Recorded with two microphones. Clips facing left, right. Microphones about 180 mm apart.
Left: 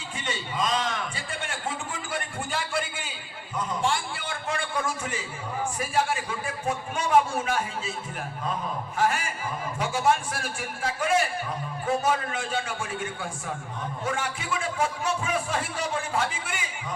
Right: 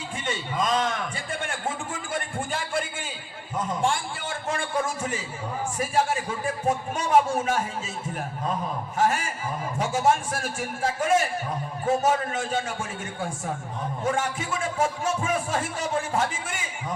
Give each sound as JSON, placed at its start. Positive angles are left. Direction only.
{"t": 0.3, "sound": "a sound", "side_deg": -50}
{"t": 5.8, "sound": "a man's voice", "side_deg": -40}
{"t": 9.0, "sound": "a man's voice", "side_deg": -40}